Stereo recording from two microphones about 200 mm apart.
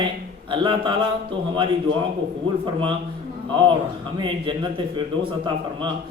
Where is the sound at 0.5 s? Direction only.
25° right (ahead or behind).